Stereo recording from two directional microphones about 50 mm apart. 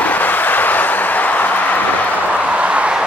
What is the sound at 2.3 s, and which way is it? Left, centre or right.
Vehicle, right.